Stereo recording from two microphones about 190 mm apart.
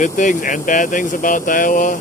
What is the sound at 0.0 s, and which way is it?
Speech, 40° left (ahead or behind).